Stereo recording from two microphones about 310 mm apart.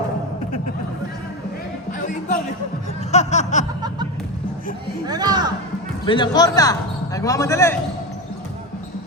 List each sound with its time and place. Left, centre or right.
1.9 s a sound: left
5.0 s speech: centre
6.1 s a man's voice: centre